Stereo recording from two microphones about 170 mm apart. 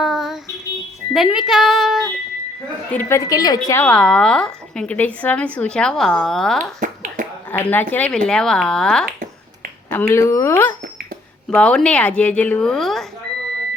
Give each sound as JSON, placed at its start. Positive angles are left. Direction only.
{"t": 0.0, "sound": "child singing", "side_deg": 0}
{"t": 1.1, "sound": "a woman's voice", "side_deg": 0}
{"t": 2.9, "sound": "a woman's voice", "side_deg": 15}
{"t": 3.8, "sound": "a woman's voice", "side_deg": 5}
{"t": 6.7, "sound": "finger snapping", "side_deg": -50}
{"t": 7.5, "sound": "a woman's voice", "side_deg": 10}